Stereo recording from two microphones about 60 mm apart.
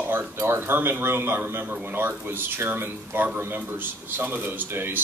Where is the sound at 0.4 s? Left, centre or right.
Right.